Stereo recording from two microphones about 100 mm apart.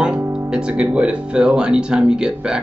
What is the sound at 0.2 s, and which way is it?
Music, 25° right (ahead or behind).